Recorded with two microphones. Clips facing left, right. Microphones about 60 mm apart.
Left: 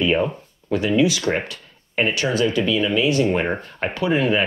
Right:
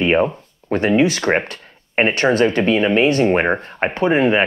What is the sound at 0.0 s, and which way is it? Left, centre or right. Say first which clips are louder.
Speech: right 4 dB; right.